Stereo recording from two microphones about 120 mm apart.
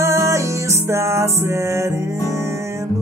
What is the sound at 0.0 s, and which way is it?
Music, 20° right (ahead or behind).